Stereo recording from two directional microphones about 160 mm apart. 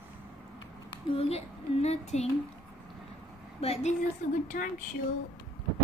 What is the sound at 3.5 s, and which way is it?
Speech, 40° left (ahead or behind).